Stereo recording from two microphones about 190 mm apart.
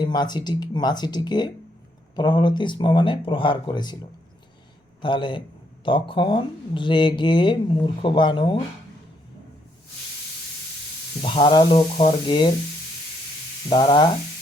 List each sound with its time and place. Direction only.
0.0 s speech: 20° left (ahead or behind)
5.0 s speech: 25° left (ahead or behind)
11.2 s speech: 30° left (ahead or behind)
13.7 s speech: 25° left (ahead or behind)